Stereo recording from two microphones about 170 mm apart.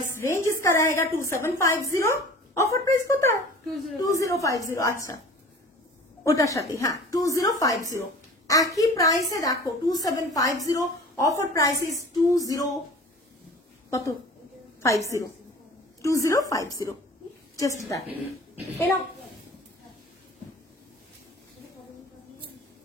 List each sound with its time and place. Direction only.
0.2 s a woman's voice: 15° left (ahead or behind)
6.2 s a woman's voice: 20° left (ahead or behind)
13.8 s a woman's voice: 20° left (ahead or behind)